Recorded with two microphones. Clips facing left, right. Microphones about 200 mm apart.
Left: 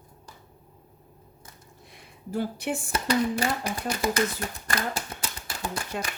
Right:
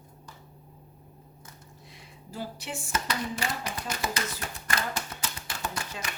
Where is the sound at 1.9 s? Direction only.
55° left (ahead or behind).